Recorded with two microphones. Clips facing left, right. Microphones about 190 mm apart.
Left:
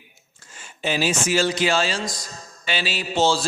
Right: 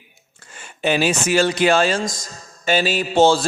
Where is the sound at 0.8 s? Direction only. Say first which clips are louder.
Right 4 dB; 60° right (ahead or behind).